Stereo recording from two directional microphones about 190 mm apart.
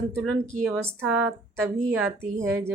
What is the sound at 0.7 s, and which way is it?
Speech, 10° right (ahead or behind).